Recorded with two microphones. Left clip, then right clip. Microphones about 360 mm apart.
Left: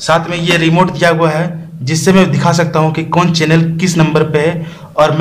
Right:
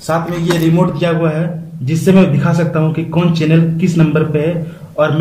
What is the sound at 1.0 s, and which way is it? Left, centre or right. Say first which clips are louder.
A man's voice: left 5 dB; centre.